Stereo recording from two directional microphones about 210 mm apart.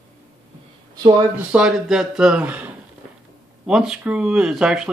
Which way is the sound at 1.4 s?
5° right (ahead or behind).